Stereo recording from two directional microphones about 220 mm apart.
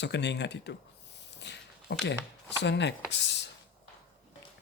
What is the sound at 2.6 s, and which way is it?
Speech, 50° left (ahead or behind).